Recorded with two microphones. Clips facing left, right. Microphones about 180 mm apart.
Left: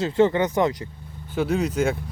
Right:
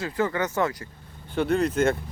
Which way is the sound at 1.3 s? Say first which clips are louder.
Even; centre (ahead or behind).